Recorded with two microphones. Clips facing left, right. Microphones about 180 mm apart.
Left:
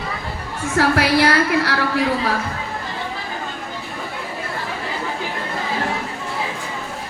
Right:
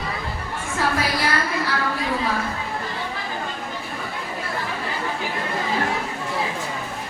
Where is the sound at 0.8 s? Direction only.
80° left.